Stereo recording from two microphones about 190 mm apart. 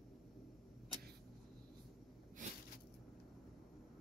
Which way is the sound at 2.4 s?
40° right (ahead or behind).